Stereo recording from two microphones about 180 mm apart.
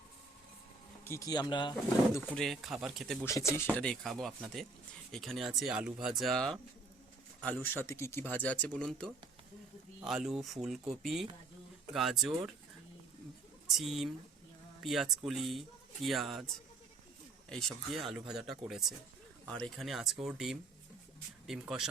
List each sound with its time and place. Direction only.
1.0 s speech: 15° left (ahead or behind)
2.3 s a man's voice: centre (ahead or behind)
3.2 s a man's voice: 10° left (ahead or behind)
13.7 s a man's voice: centre (ahead or behind)
17.5 s a man's voice: 5° left (ahead or behind)